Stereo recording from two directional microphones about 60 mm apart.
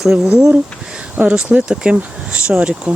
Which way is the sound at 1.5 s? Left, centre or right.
Centre.